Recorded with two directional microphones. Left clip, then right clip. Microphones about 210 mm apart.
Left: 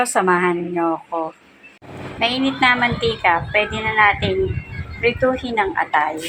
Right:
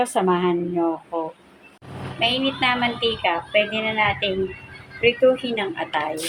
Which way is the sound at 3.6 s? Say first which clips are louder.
Left 1 dB; 30° left (ahead or behind).